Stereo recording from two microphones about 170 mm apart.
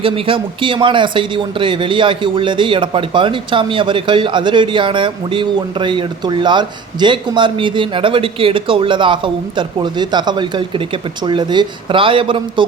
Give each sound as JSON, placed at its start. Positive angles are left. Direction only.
{"t": 0.0, "sound": "speech", "side_deg": -30}